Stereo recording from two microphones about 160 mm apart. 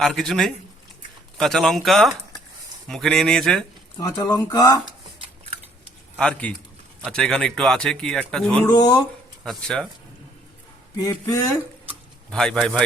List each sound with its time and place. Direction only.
0.0 s speech: centre (ahead or behind)
3.9 s speech: 25° left (ahead or behind)
6.1 s speech: 5° left (ahead or behind)
8.6 s speech: 25° left (ahead or behind)
9.4 s speech: 5° left (ahead or behind)
10.9 s speech: 20° left (ahead or behind)
12.3 s speech: 5° left (ahead or behind)